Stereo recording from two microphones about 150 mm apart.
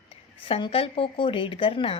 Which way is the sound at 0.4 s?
40° left (ahead or behind).